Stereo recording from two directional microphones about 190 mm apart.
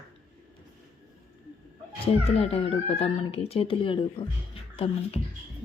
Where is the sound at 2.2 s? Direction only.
30° left (ahead or behind).